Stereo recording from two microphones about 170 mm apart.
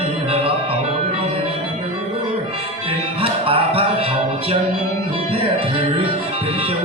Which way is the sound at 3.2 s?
35° right (ahead or behind).